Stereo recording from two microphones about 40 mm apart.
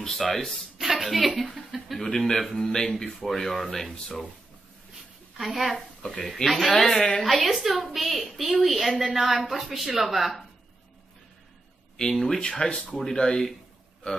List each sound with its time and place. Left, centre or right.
0.0 s speech: centre
0.7 s speech: centre
2.0 s a woman's voice: centre
4.9 s a sound: centre
6.2 s a woman's voice: centre
7.4 s a woman's voice: centre
12.0 s speech: centre
12.4 s speech: left